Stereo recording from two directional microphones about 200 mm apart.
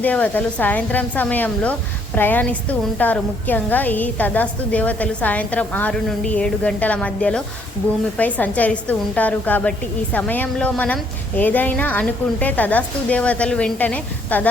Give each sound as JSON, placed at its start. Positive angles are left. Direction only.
{"t": 0.0, "sound": "a woman's voice", "side_deg": 5}